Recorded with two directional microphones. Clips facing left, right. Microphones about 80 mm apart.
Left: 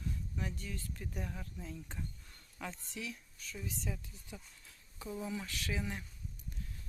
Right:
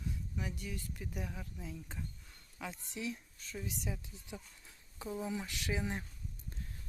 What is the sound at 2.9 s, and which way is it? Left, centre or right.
Speech, right.